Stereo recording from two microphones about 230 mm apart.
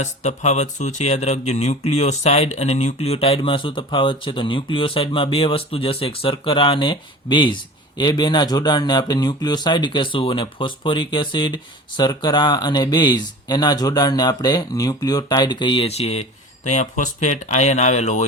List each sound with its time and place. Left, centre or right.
0.0 s speech: left